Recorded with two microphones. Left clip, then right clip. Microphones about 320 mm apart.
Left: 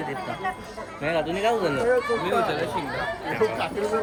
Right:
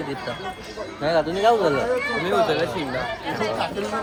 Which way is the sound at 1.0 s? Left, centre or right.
Right.